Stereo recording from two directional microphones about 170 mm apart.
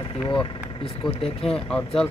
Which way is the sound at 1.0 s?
35° left (ahead or behind).